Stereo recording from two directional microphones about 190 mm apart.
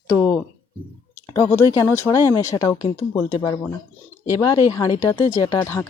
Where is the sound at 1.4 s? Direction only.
15° left (ahead or behind).